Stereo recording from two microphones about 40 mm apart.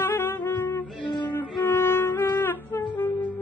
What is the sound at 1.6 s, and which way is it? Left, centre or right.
Music, left.